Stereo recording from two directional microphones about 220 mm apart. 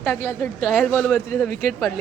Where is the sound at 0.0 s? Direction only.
10° left (ahead or behind).